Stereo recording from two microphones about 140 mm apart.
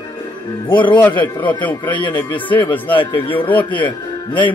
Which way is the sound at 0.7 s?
35° left (ahead or behind).